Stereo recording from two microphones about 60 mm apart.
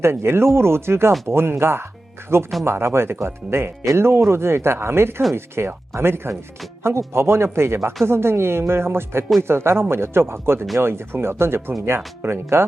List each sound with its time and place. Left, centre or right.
0.0 s speech: right